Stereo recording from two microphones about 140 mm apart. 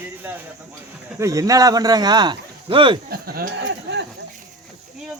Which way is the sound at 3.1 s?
90° right.